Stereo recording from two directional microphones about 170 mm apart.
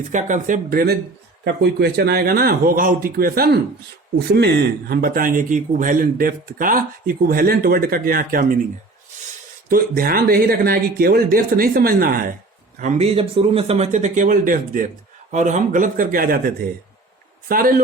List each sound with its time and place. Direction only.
0.1 s speech: 45° right (ahead or behind)
1.5 s speech: 75° right (ahead or behind)
4.3 s speech: 75° right (ahead or behind); by 8.4 s 55° right (ahead or behind)
9.6 s speech: 60° right (ahead or behind)
12.8 s speech: 35° right (ahead or behind); by 14.8 s 55° right (ahead or behind)
15.3 s speech: 45° right (ahead or behind)